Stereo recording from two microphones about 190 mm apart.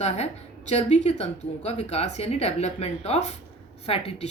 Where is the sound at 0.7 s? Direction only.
35° left (ahead or behind).